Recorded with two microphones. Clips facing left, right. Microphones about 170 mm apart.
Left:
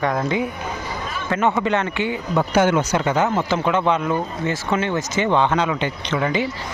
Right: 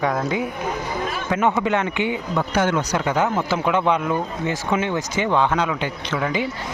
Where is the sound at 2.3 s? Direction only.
5° left (ahead or behind).